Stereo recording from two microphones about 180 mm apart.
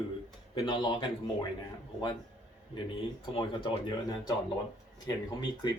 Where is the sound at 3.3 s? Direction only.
25° left (ahead or behind).